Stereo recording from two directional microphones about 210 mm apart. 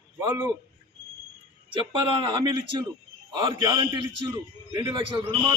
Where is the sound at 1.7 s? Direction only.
25° right (ahead or behind).